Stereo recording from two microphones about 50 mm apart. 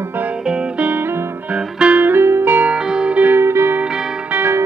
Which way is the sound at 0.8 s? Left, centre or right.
Right.